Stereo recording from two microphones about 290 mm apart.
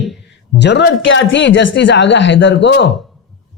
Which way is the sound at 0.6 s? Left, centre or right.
Left.